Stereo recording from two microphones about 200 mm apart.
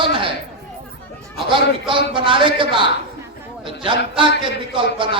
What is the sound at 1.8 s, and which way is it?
Speech, 25° right (ahead or behind).